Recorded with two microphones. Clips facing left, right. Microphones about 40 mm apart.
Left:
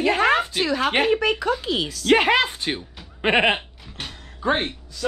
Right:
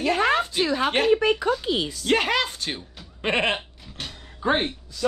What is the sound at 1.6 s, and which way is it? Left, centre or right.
Speech, left.